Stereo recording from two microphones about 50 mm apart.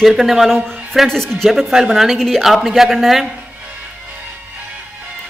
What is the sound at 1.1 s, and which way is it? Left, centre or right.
A woman's voice, centre.